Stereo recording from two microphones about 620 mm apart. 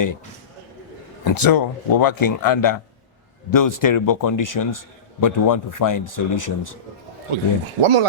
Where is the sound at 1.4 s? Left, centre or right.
Left.